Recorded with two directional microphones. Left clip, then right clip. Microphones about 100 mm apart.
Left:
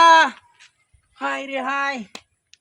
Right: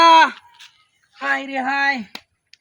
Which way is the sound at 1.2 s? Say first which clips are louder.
Right 3 dB; 35° right (ahead or behind).